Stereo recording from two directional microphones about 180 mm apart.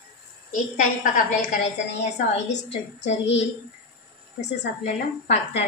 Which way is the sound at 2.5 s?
75° left (ahead or behind).